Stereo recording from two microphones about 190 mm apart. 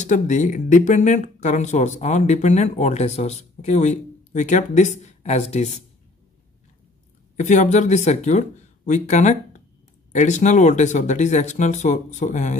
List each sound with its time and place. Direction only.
0.0 s speech: 40° left (ahead or behind)
7.3 s speech: 40° left (ahead or behind)